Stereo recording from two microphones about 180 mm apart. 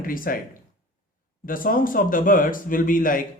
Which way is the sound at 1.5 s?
50° left (ahead or behind).